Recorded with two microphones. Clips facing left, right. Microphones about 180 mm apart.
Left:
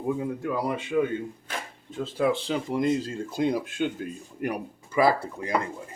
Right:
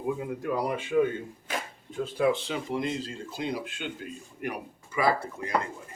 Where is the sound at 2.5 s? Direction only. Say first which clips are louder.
Left 5 dB; 45° left (ahead or behind).